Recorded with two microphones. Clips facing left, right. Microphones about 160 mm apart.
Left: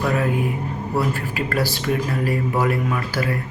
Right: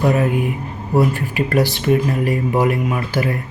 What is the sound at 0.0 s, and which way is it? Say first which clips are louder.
Speech: right 4 dB; 20° right (ahead or behind).